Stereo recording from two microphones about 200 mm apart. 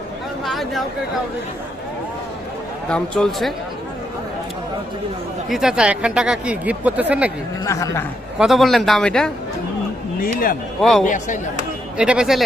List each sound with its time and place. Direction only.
0.4 s a sound: centre (ahead or behind)
2.9 s speech: centre (ahead or behind)
5.5 s speech: centre (ahead or behind)
7.6 s speech: 15° left (ahead or behind)
8.4 s speech: centre (ahead or behind)
10.8 s speech: centre (ahead or behind)
11.0 s speech: 40° left (ahead or behind)
11.9 s speech: 5° right (ahead or behind)